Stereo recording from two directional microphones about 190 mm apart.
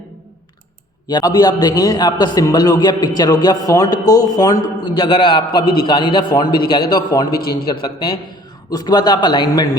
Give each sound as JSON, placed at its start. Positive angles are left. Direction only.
{"t": 1.0, "sound": "a man's voice", "side_deg": 20}